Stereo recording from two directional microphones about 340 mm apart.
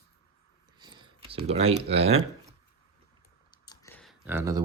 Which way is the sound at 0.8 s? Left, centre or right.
Centre.